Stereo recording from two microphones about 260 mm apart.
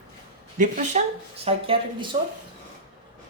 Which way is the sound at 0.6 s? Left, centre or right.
Right.